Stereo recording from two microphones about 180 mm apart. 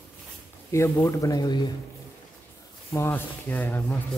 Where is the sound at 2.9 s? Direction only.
10° left (ahead or behind).